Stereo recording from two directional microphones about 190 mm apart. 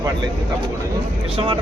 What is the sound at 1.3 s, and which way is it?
Speech, 30° right (ahead or behind).